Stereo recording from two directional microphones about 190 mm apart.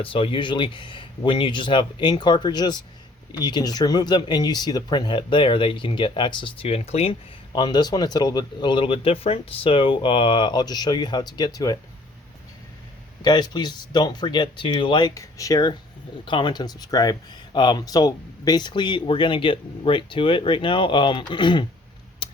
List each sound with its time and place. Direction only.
0.0 s speech: 30° left (ahead or behind)
13.2 s speech: 20° left (ahead or behind)
22.2 s a sound: 25° left (ahead or behind)